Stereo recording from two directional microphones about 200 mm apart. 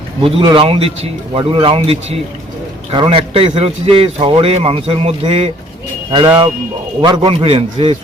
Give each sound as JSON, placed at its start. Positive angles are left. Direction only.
{"t": 0.3, "sound": "a man's voice", "side_deg": -25}